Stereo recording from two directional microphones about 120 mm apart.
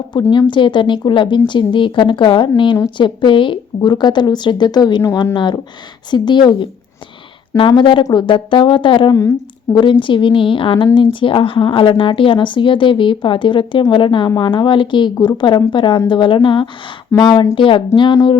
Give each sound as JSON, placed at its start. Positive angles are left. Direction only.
{"t": 0.1, "sound": "a woman's voice", "side_deg": 40}